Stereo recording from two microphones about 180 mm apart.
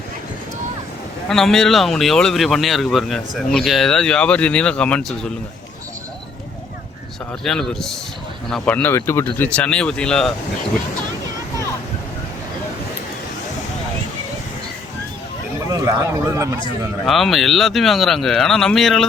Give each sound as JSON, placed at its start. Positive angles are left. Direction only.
{"t": 1.3, "sound": "speech", "side_deg": 0}
{"t": 7.4, "sound": "speech", "side_deg": 5}
{"t": 15.7, "sound": "speech", "side_deg": -15}
{"t": 17.1, "sound": "speech", "side_deg": 0}